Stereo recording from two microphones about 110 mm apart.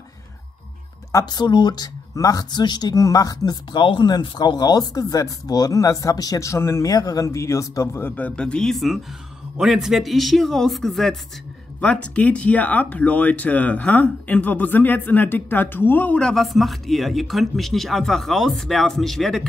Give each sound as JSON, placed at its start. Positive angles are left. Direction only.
{"t": 1.1, "sound": "speech", "side_deg": 40}
{"t": 3.7, "sound": "speech", "side_deg": 45}
{"t": 8.4, "sound": "a man's voice", "side_deg": 5}